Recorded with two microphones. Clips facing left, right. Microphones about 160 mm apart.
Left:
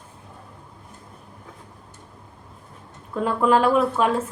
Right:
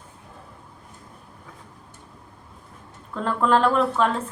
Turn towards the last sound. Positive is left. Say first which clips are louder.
# left 2 dB
turn(degrees=10)  # may be behind; listen again after turning